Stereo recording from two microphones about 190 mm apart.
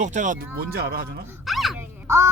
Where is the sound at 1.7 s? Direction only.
15° right (ahead or behind).